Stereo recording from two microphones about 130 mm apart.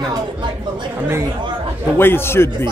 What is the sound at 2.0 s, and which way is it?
Speech, 15° left (ahead or behind).